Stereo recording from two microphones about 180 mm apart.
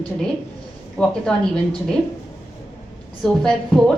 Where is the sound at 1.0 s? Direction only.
5° left (ahead or behind).